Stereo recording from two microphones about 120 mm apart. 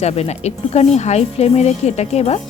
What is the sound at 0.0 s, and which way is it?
Speech, 65° left (ahead or behind).